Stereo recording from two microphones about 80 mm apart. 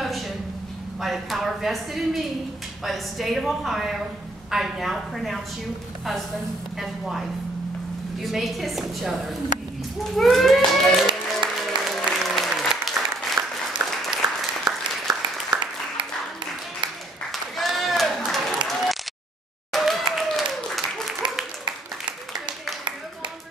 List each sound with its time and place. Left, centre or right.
1.0 s a woman's voice: centre
6.8 s a woman's voice: centre
11.1 s applause: centre
13.8 s applause: right
14.1 s applause: centre
17.3 s applause: centre
21.2 s a sound: right